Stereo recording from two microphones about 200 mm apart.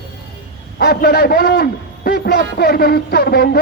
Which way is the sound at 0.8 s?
50° left (ahead or behind).